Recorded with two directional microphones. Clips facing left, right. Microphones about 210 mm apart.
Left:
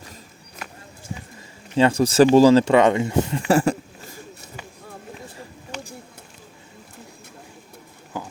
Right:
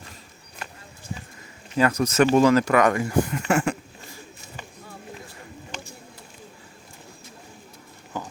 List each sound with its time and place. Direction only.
1.7 s speech: 30° left (ahead or behind)